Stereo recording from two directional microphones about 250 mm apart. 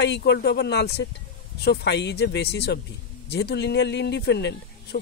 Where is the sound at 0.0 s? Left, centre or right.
Left.